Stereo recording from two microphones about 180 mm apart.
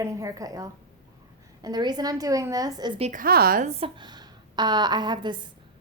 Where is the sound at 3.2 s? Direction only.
55° right (ahead or behind).